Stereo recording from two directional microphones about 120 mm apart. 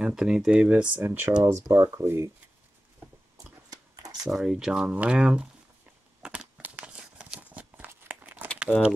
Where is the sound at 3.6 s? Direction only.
30° right (ahead or behind).